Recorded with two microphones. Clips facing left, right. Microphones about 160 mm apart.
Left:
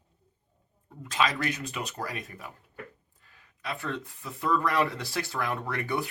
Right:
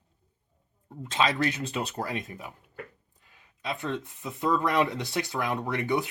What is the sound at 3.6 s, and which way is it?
Speech, 20° right (ahead or behind).